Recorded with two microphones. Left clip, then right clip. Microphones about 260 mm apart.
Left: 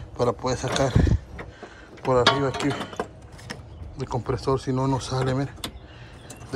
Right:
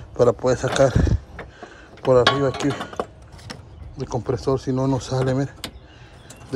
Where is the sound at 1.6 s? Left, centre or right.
Right.